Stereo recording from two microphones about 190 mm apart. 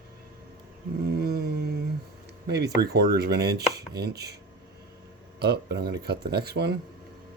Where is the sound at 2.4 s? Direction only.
55° right (ahead or behind).